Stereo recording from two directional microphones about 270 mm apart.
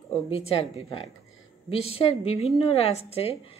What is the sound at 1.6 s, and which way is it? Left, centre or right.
A woman's voice, left.